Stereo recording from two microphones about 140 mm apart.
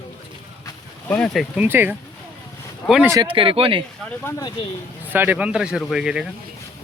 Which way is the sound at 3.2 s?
40° right (ahead or behind).